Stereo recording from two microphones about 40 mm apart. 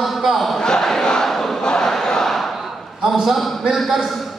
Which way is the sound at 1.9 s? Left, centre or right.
Centre.